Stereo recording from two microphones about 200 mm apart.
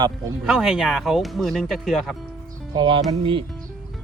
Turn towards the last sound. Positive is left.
turn(degrees=-25)  # may be behind; listen again after turning